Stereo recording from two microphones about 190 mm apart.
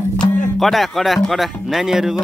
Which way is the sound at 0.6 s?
Centre (ahead or behind).